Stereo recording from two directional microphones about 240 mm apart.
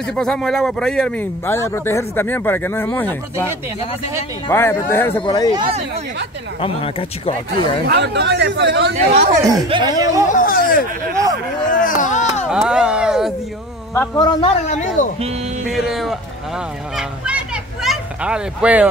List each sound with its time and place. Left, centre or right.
0.0 s speech: centre
4.5 s speech: centre
5.5 s speech: right
6.6 s speech: left
7.8 s speech: right
8.9 s speech: right
9.4 s speech: centre
10.3 s speech: left
12.4 s speech: centre
13.9 s speech: centre; by 15.0 s left
15.1 s speech: right
15.6 s speech: centre